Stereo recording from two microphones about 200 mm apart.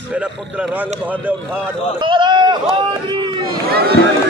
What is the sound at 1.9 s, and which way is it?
Speech, 25° right (ahead or behind).